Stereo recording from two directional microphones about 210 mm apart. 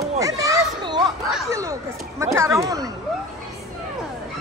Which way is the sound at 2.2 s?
15° right (ahead or behind).